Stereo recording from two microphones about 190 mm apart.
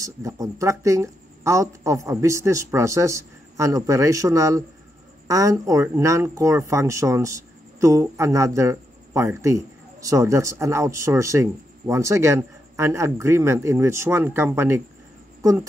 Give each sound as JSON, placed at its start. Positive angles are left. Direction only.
{"t": 0.0, "sound": "speech", "side_deg": -15}